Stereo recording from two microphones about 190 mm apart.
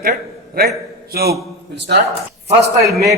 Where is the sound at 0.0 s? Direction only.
50° right (ahead or behind).